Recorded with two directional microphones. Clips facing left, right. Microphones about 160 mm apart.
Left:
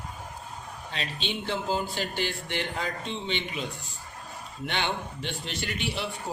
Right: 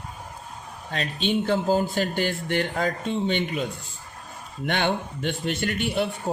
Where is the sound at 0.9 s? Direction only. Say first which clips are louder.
Right 9 dB; 50° right (ahead or behind).